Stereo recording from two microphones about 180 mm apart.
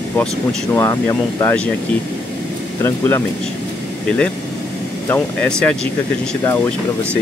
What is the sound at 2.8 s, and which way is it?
Speech, 15° left (ahead or behind).